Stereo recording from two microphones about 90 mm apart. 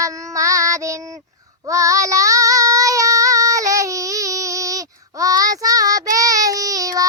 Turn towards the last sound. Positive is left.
turn(degrees=-40)  # may be behind; listen again after turning